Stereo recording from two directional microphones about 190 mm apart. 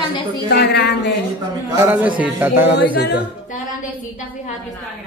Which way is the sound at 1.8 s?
10° right (ahead or behind).